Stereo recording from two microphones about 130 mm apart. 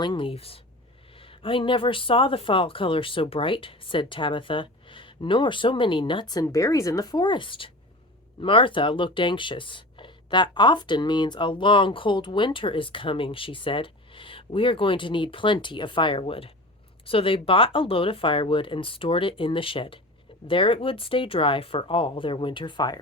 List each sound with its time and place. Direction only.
0.0 s speech: 40° left (ahead or behind)
6.4 s speech: 25° left (ahead or behind)